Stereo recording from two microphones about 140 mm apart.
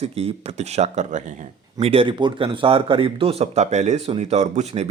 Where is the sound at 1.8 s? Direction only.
40° right (ahead or behind).